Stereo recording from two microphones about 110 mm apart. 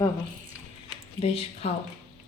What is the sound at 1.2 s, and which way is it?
Speech, 70° left (ahead or behind).